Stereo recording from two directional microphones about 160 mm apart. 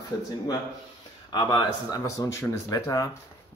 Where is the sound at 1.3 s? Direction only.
25° left (ahead or behind).